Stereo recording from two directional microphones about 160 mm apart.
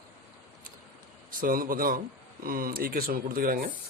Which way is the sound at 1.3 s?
60° right (ahead or behind).